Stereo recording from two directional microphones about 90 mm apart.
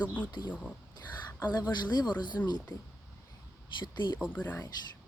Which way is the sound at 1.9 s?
50° left (ahead or behind).